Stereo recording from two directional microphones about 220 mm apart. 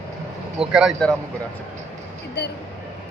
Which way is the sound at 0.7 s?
Centre (ahead or behind).